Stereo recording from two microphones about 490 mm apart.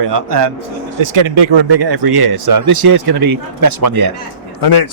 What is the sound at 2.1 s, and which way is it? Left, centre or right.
Speech, right.